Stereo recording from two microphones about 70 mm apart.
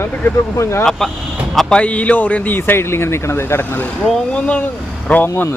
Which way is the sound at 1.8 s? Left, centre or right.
Centre.